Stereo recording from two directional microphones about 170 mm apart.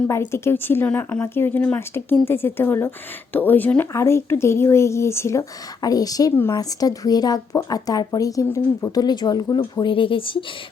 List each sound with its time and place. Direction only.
0.1 s speech: 15° left (ahead or behind)